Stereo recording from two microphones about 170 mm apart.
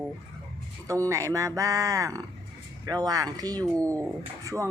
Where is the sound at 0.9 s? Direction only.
20° right (ahead or behind).